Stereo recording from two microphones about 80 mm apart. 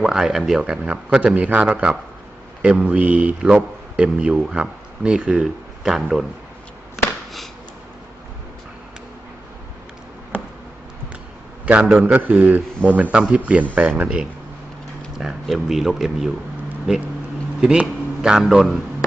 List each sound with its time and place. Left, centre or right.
0.0 s a man's voice: centre
11.6 s a man's voice: centre